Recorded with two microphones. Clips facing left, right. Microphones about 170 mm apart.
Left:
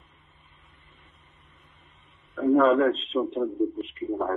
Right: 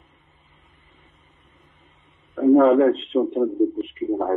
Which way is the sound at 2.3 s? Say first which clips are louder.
Right 5 dB; 30° right (ahead or behind).